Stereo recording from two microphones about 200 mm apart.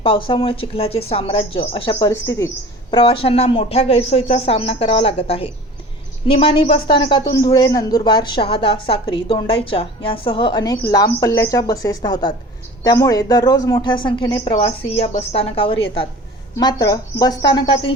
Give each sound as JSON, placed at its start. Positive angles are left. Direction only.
{"t": 0.0, "sound": "speech", "side_deg": 25}